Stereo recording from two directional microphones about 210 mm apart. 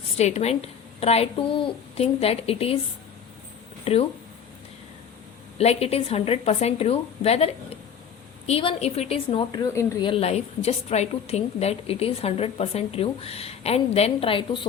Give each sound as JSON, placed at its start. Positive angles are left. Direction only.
{"t": 0.2, "sound": "a woman's voice", "side_deg": 30}
{"t": 3.9, "sound": "a woman's voice", "side_deg": 30}
{"t": 5.5, "sound": "a woman's voice", "side_deg": 30}
{"t": 10.1, "sound": "a woman's voice", "side_deg": 30}